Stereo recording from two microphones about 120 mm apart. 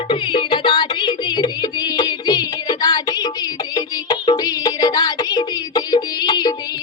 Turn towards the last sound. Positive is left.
turn(degrees=40)  # may be behind; listen again after turning